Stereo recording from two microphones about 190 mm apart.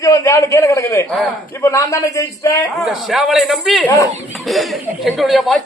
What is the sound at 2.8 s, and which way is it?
A man's voice, centre (ahead or behind).